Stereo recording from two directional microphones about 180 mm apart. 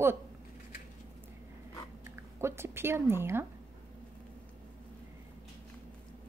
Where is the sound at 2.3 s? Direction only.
15° right (ahead or behind).